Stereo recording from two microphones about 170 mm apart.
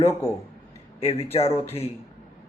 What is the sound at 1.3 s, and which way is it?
Speech, 35° left (ahead or behind).